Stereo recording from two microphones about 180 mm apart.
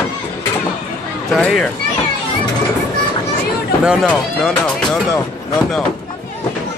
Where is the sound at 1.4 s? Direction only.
5° left (ahead or behind).